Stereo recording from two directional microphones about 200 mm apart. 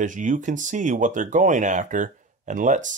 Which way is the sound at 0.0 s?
40° right (ahead or behind).